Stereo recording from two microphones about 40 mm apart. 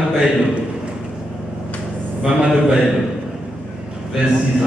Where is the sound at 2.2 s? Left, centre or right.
Right.